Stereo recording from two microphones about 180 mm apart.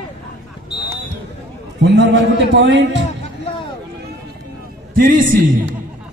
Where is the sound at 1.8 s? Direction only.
75° right (ahead or behind).